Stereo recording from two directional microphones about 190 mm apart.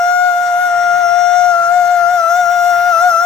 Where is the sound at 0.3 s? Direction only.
5° left (ahead or behind).